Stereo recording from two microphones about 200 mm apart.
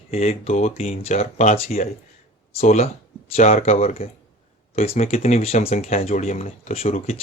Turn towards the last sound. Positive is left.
turn(degrees=30)  # may be behind; listen again after turning